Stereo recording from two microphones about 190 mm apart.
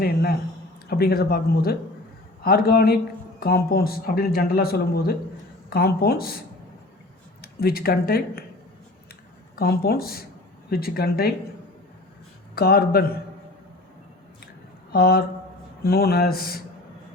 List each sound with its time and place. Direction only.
0.0 s speech: 55° left (ahead or behind)
7.4 s speech: 55° left (ahead or behind)
9.6 s speech: 55° left (ahead or behind)
12.5 s speech: 55° left (ahead or behind)
14.9 s speech: 55° left (ahead or behind)